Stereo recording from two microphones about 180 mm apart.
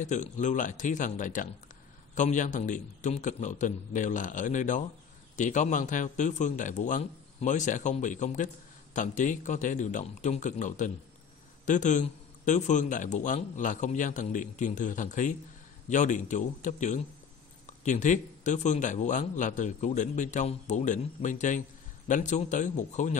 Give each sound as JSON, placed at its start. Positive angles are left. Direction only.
{"t": 0.0, "sound": "speech", "side_deg": 45}